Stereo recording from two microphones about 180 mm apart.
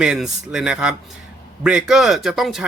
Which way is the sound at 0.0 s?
5° right (ahead or behind).